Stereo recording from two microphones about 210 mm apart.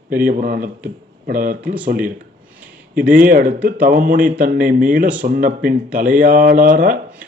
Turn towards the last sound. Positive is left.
turn(degrees=-40)  # may be behind; listen again after turning